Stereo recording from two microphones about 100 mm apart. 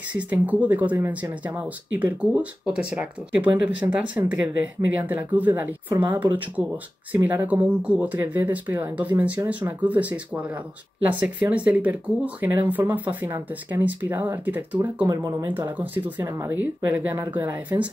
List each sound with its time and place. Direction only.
0.3 s speech: 15° right (ahead or behind)
7.2 s speech: 20° right (ahead or behind)